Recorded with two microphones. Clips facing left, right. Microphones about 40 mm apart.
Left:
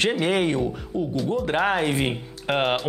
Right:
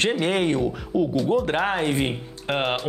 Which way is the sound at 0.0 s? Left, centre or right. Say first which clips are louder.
Even; centre.